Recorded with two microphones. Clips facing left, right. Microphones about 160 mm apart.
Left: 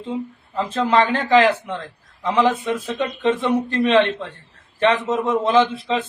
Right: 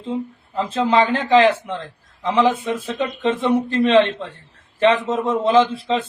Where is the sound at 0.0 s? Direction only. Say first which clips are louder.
Right 1 dB; centre (ahead or behind).